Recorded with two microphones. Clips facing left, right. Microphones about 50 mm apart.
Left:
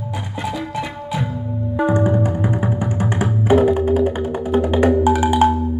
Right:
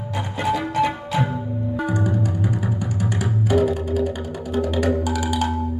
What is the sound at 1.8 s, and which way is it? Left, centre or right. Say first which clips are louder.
Music: left 8 dB; left.